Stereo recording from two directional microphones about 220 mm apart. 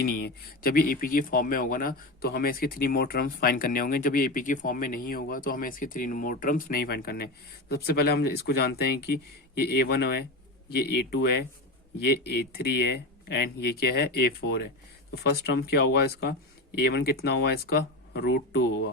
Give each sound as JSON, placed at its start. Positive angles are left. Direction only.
{"t": 0.0, "sound": "speech", "side_deg": 45}